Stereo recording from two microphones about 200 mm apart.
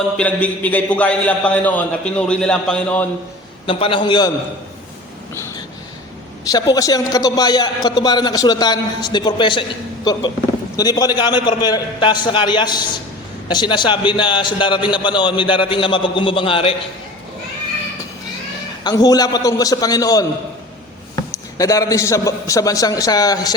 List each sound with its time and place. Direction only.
0.2 s a man's voice: 5° left (ahead or behind)
3.7 s a man's voice: 25° left (ahead or behind)
6.4 s a man's voice: 15° left (ahead or behind)
18.8 s a man's voice: 20° left (ahead or behind)